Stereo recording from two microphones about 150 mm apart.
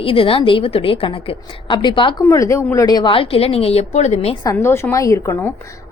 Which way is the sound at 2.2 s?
20° left (ahead or behind).